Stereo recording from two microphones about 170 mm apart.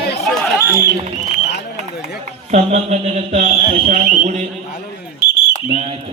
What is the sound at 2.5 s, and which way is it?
A man's voice, 45° right (ahead or behind).